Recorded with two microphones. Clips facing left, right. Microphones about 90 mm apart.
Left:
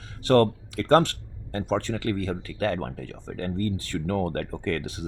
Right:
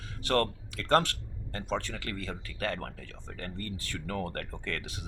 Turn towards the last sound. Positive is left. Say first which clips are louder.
# left 9 dB
turn(degrees=30)  # may be behind; listen again after turning